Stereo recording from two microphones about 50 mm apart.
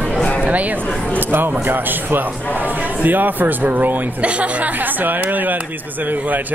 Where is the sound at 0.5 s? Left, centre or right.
Right.